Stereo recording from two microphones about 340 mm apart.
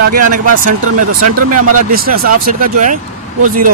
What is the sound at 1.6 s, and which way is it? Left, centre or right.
Speech, right.